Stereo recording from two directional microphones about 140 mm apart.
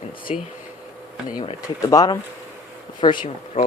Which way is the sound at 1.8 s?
25° left (ahead or behind).